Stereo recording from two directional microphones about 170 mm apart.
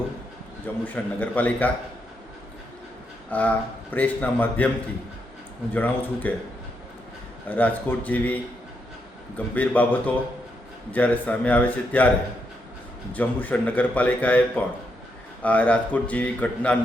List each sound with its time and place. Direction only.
0.9 s a man's voice: 10° left (ahead or behind)
3.2 s a man's voice: 10° left (ahead or behind)
5.7 s a man's voice: 10° left (ahead or behind)
7.4 s a man's voice: 10° left (ahead or behind)
9.6 s a man's voice: 10° left (ahead or behind)
13.1 s a man's voice: 10° left (ahead or behind)